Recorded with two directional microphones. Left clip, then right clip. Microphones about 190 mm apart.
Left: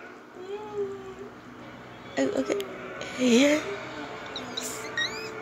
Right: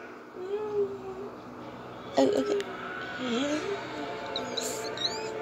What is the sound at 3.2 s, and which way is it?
Speech, 65° left (ahead or behind).